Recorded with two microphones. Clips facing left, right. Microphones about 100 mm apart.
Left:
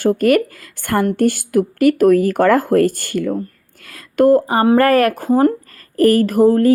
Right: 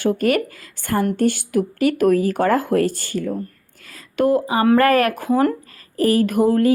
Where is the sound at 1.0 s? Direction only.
50° left (ahead or behind); by 3.3 s 65° left (ahead or behind).